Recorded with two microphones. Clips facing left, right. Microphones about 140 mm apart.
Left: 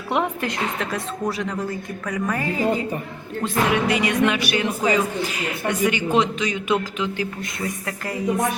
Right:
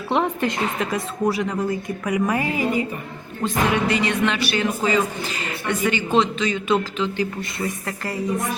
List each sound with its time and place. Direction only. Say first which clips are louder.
0.1 s a woman's voice: right 2 dB; 5° left (ahead or behind); by 2.8 s 15° right (ahead or behind)
3.4 s speech: even; 5° left (ahead or behind)